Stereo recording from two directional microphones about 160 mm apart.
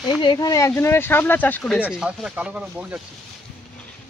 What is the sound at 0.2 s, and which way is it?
Speech, 25° left (ahead or behind).